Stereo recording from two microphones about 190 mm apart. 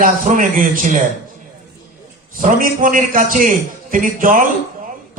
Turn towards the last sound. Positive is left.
turn(degrees=-45)  # may be behind; listen again after turning